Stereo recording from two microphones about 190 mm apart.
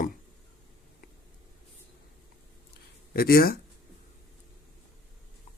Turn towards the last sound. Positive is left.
turn(degrees=50)  # may be behind; listen again after turning